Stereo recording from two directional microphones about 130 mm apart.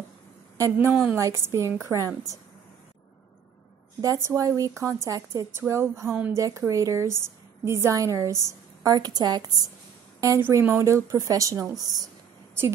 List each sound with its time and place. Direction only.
0.6 s a woman's voice: 20° right (ahead or behind)
4.0 s a woman's voice: 25° right (ahead or behind)
10.4 s a woman's voice: 15° right (ahead or behind)